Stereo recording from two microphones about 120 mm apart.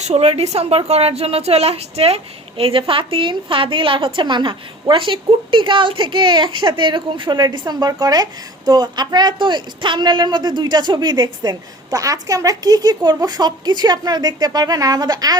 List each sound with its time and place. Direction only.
0.0 s a woman's voice: 60° right (ahead or behind); by 15.4 s 35° right (ahead or behind)